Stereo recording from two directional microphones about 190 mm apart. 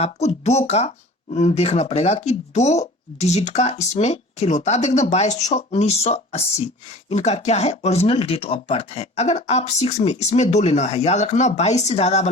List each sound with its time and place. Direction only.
0.0 s speech: 35° left (ahead or behind)